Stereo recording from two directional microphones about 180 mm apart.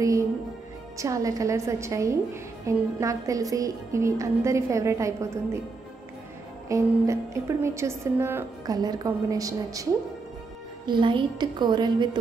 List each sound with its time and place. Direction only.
0.9 s a woman's voice: 20° right (ahead or behind)
6.7 s a woman's voice: 15° right (ahead or behind)
10.9 s a woman's voice: 25° right (ahead or behind)